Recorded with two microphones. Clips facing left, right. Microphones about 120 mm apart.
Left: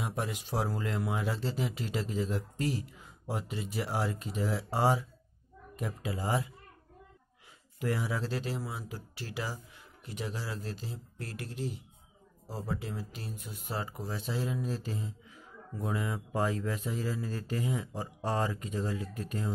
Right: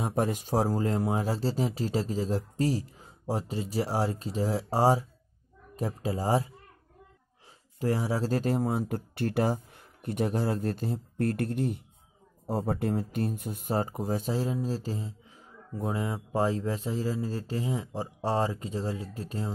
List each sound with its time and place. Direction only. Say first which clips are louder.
0.0 s speech: right 7 dB; 45° right (ahead or behind)
7.8 s speech: right 5 dB; 35° right (ahead or behind)